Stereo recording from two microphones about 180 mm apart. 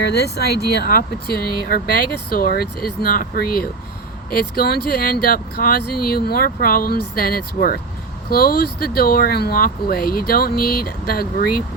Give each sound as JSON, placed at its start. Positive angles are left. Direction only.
{"t": 0.0, "sound": "speech", "side_deg": 65}